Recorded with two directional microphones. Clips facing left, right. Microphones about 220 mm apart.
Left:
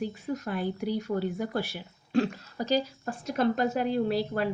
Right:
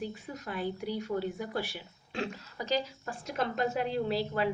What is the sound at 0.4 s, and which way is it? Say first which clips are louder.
Speech: left 1 dB; 45° left (ahead or behind).